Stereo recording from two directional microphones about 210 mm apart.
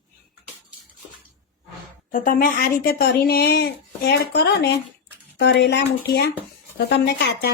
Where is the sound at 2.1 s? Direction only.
40° left (ahead or behind).